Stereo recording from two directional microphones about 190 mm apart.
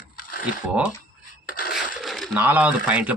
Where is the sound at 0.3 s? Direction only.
45° left (ahead or behind).